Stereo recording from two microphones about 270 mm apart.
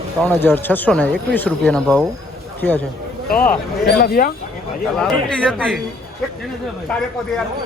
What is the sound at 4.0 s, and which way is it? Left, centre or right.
Speech, left.